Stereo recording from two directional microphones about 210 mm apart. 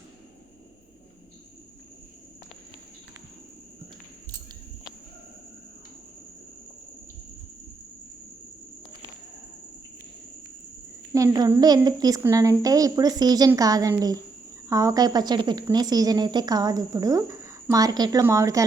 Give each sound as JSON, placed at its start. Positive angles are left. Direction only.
{"t": 11.1, "sound": "speech", "side_deg": -15}